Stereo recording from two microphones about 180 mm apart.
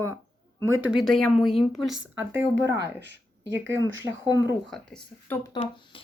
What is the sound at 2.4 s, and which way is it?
Speech, 10° right (ahead or behind).